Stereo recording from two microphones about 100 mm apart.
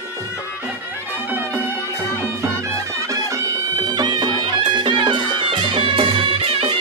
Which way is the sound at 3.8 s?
45° right (ahead or behind).